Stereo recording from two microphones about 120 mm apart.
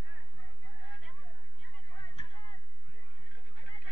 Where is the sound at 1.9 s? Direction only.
40° left (ahead or behind).